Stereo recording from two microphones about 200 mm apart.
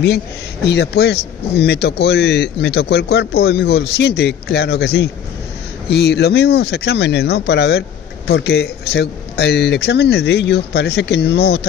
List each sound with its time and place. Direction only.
0.7 s speech: 55° left (ahead or behind)